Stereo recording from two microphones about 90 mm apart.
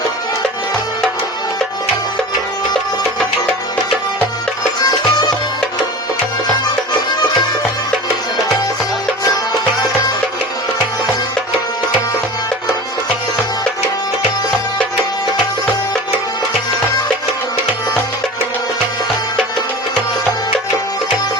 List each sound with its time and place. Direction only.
4.8 s music: 50° left (ahead or behind)
6.7 s music: 50° left (ahead or behind)
9.2 s music: 50° left (ahead or behind)